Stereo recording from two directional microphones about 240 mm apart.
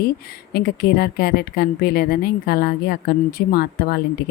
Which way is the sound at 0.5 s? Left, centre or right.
Left.